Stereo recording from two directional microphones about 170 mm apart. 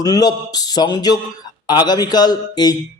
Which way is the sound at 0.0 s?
20° left (ahead or behind).